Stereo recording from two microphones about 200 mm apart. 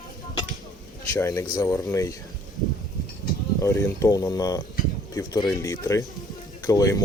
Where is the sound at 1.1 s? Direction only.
15° left (ahead or behind).